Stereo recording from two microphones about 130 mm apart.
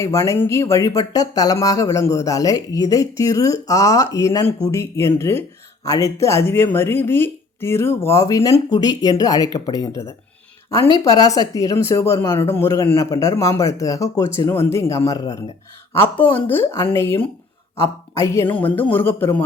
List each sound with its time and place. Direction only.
0.0 s speech: 25° left (ahead or behind)
16.0 s a man's voice: 15° left (ahead or behind)